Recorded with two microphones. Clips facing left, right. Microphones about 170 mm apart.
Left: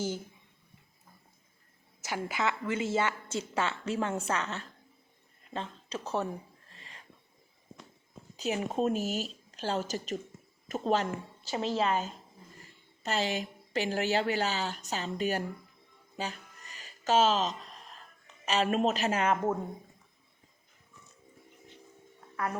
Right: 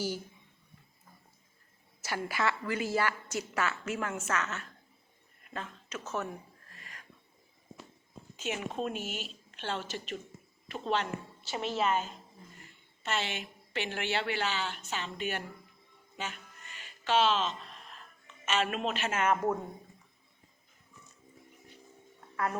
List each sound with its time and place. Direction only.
2.0 s a woman's voice: 20° left (ahead or behind)
6.7 s a sound: 30° left (ahead or behind)
8.4 s a woman's voice: 35° left (ahead or behind)
16.1 s music: 35° left (ahead or behind)
18.4 s a woman's voice: 35° left (ahead or behind)